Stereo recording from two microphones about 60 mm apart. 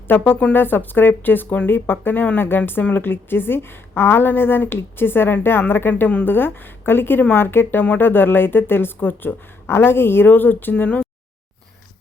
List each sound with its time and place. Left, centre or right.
0.5 s a woman's voice: left